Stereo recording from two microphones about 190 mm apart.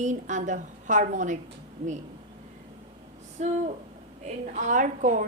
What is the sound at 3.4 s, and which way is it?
A woman's voice, 35° right (ahead or behind).